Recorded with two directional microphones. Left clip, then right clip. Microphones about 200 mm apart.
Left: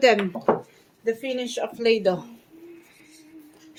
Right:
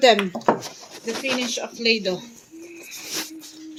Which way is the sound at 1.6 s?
30° left (ahead or behind).